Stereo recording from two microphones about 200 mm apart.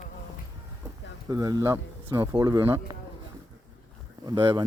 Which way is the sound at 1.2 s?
20° right (ahead or behind).